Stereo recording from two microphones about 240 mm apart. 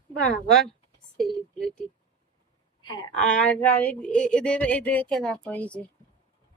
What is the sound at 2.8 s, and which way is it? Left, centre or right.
Speech, centre.